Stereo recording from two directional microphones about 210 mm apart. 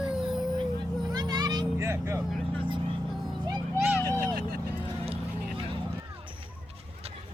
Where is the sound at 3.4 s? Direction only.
15° right (ahead or behind).